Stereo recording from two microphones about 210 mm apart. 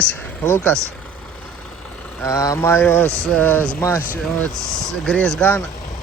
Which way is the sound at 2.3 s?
15° left (ahead or behind).